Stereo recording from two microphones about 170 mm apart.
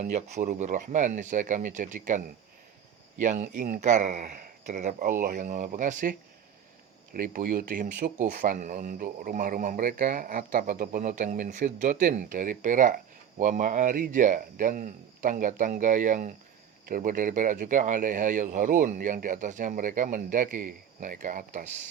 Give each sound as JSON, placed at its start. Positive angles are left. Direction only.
{"t": 0.0, "sound": "speech", "side_deg": -40}
{"t": 3.2, "sound": "speech", "side_deg": -45}